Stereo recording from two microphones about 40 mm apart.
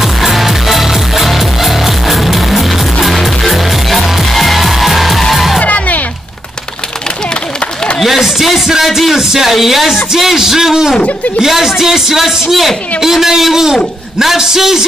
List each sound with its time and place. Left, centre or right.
0.0 s music: centre
5.6 s music: left
8.0 s a man's voice: centre